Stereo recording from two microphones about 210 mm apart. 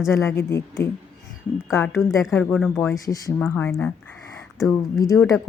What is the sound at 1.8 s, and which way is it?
Speech, centre (ahead or behind).